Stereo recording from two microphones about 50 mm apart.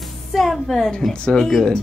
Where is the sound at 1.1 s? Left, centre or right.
Centre.